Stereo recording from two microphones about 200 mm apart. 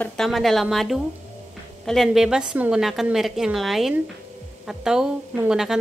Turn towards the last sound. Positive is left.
turn(degrees=-5)  # may be behind; listen again after turning